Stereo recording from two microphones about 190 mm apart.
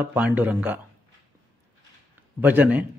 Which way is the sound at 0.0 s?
10° right (ahead or behind).